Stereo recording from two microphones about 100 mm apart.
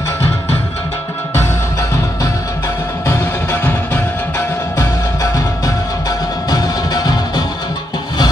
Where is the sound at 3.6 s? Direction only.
20° left (ahead or behind).